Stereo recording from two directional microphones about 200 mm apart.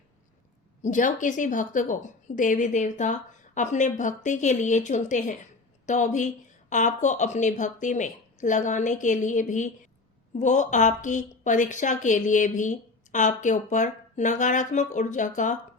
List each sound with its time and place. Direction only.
0.8 s a woman's voice: 40° left (ahead or behind)